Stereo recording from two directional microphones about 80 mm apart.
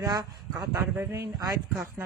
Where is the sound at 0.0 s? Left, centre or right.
Right.